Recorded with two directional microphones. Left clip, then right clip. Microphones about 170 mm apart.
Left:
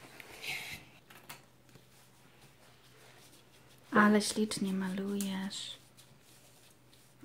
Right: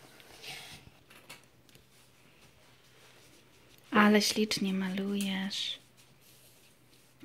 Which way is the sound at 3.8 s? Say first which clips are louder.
Right 2 dB; 20° right (ahead or behind).